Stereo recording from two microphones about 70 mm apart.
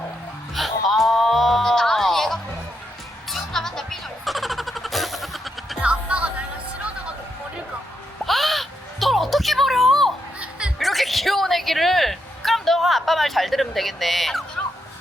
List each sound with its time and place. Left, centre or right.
0.5 s music: centre
5.8 s music: centre
8.2 s music: centre